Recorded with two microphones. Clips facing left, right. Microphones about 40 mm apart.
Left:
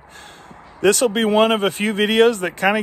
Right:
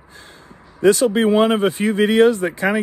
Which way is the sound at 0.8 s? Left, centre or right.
Left.